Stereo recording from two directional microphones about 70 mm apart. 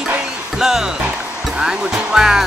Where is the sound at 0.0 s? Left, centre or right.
Centre.